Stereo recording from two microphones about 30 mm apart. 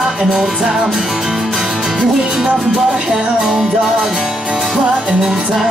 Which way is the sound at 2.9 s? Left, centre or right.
Right.